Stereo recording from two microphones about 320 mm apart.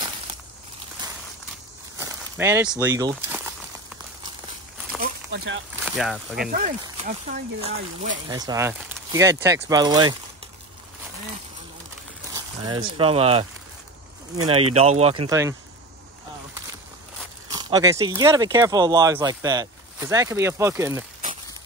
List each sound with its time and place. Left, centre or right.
2.0 s speech: centre
5.0 s a sound: right
5.9 s speech: centre
6.5 s speech: right
8.3 s speech: centre
12.6 s speech: centre
14.8 s speech: centre
17.5 s speech: centre